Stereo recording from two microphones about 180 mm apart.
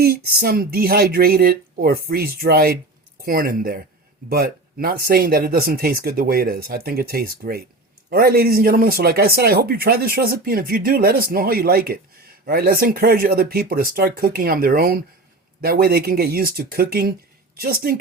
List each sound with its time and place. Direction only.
0.0 s speech: 60° right (ahead or behind)